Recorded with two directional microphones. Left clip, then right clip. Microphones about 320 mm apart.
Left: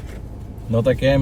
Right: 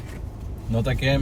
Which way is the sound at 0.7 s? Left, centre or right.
Centre.